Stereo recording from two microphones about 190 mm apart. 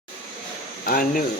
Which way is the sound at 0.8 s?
50° left (ahead or behind).